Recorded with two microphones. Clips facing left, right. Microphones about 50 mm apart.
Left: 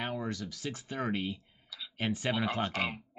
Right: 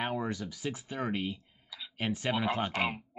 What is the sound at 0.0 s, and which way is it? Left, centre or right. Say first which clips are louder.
Speech: right 2 dB; centre.